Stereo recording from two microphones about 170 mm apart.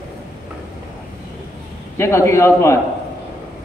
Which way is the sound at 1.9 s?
15° left (ahead or behind).